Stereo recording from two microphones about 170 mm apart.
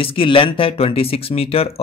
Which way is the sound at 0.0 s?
30° left (ahead or behind).